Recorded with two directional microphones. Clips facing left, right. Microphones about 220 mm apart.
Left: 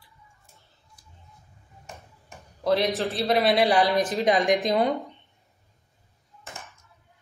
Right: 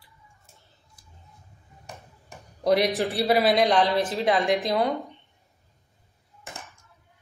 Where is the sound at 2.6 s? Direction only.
15° right (ahead or behind).